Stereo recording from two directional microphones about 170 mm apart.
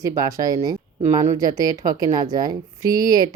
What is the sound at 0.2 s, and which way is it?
Speech, 20° right (ahead or behind).